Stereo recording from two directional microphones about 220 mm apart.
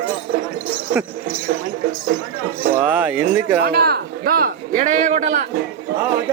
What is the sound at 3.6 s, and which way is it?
A man's voice, 45° right (ahead or behind).